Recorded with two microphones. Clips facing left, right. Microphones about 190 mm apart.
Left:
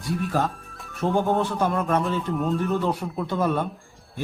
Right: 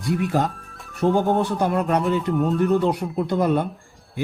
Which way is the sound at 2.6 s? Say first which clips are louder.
Right 5 dB; 15° right (ahead or behind).